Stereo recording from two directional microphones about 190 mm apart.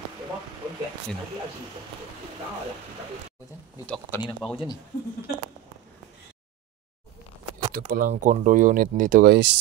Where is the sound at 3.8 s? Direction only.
10° left (ahead or behind).